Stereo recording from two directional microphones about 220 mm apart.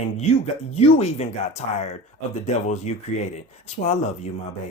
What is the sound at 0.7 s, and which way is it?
Speech, 30° left (ahead or behind).